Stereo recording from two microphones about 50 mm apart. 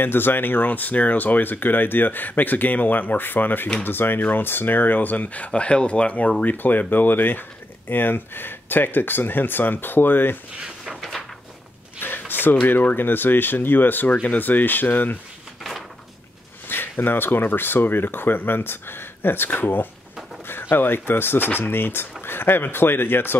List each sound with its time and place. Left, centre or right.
0.0 s speech: left
6.4 s speech: left
11.0 s a sound: centre
12.0 s a sound: left
12.6 s speech: left
16.6 s speech: left